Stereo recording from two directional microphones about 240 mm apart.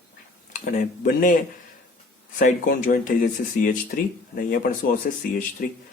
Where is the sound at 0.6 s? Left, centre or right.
Left.